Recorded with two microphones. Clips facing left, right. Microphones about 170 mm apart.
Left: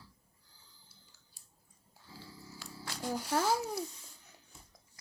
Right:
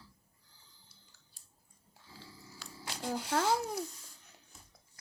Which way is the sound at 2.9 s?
20° right (ahead or behind).